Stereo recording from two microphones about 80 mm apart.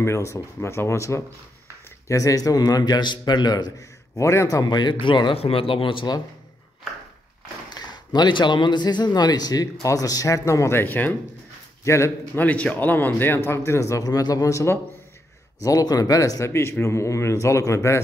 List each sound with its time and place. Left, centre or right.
0.0 s a man's voice: left
4.2 s speech: left
4.6 s a man's voice: left
5.0 s speech: left
7.7 s a man's voice: left
11.8 s a man's voice: left
12.4 s a man's voice: centre
13.6 s speech: left
15.6 s speech: left